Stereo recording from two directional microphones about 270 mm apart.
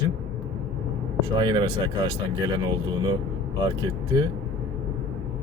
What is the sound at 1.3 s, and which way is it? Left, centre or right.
Speech, centre.